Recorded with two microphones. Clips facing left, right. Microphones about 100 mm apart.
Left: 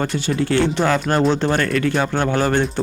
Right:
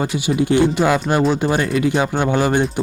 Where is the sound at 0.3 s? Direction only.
15° right (ahead or behind).